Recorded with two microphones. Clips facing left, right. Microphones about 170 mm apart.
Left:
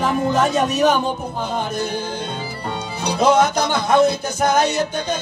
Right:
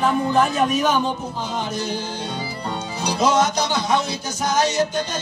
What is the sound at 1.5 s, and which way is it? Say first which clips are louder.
Music: left 2 dB; 55° left (ahead or behind).